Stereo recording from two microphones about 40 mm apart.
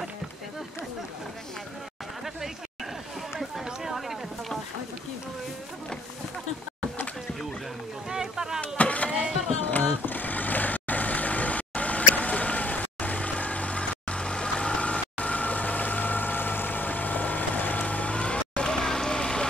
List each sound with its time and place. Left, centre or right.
3.3 s a sound: centre
8.1 s boat: centre
8.5 s vehicle: left; by 19.4 s centre